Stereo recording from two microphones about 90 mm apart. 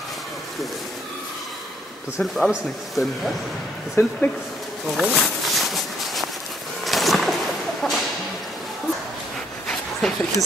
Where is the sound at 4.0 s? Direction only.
30° left (ahead or behind).